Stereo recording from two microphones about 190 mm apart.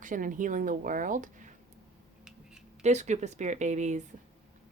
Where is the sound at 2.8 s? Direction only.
40° right (ahead or behind).